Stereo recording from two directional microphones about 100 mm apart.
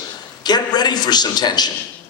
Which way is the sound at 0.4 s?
45° left (ahead or behind).